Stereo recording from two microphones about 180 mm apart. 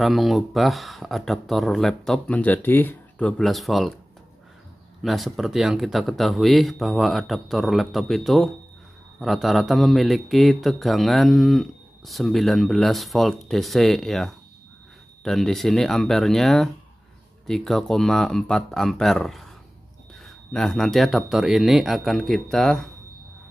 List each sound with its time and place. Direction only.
0.0 s a man's voice: centre (ahead or behind)
5.0 s a man's voice: centre (ahead or behind)